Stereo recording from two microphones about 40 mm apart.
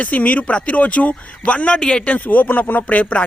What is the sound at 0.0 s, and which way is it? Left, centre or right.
Speech, left.